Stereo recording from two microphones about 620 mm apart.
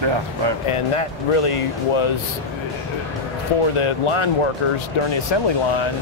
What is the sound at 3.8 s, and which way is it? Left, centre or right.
Speech, left.